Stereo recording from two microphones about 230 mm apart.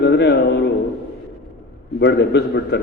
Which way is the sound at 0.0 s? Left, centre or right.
Left.